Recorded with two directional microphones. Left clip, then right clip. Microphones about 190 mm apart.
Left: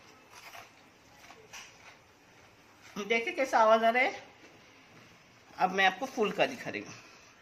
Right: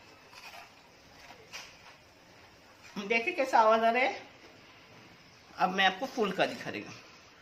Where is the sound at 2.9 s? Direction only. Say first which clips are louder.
Right 1 dB; 30° left (ahead or behind).